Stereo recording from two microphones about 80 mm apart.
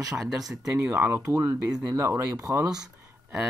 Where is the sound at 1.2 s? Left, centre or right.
Right.